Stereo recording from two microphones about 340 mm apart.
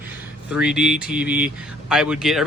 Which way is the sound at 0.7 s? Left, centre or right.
Centre.